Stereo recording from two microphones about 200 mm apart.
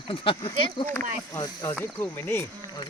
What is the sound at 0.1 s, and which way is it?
Speech, 25° left (ahead or behind).